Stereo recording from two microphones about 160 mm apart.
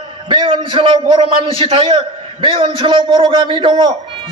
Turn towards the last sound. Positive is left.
turn(degrees=-30)  # may be behind; listen again after turning